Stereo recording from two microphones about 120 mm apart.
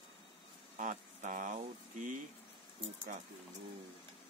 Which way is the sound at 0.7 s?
90° right.